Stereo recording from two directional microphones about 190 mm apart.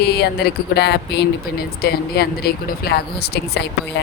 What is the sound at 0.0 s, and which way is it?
Speech, 60° left (ahead or behind).